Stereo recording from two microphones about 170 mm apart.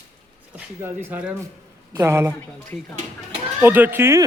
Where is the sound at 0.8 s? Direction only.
10° right (ahead or behind).